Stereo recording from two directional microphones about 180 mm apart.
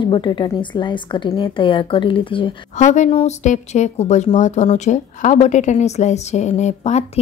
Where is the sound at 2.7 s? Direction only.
40° left (ahead or behind).